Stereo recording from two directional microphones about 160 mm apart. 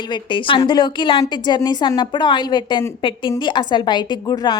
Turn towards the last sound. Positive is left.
turn(degrees=25)  # may be behind; listen again after turning